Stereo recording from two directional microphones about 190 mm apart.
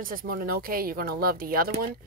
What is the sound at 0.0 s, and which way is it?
Speech, 50° right (ahead or behind).